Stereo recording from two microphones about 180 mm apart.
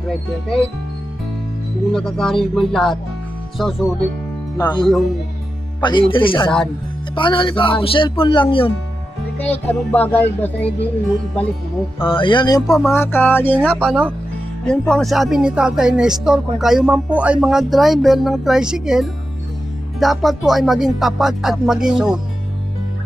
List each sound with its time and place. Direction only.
1.9 s speech: 5° left (ahead or behind)
4.6 s speech: 20° left (ahead or behind)
9.5 s speech: 10° left (ahead or behind)
12.0 s speech: 30° left (ahead or behind); by 13.7 s 10° left (ahead or behind)
13.8 s speech: 5° right (ahead or behind)